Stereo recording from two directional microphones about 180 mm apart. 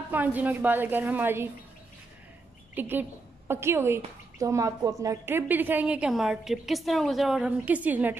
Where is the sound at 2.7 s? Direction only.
10° right (ahead or behind).